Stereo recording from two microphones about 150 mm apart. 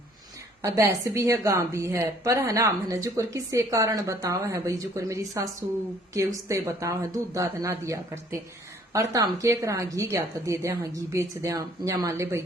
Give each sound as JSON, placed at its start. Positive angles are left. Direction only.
{"t": 0.6, "sound": "a woman's voice", "side_deg": -20}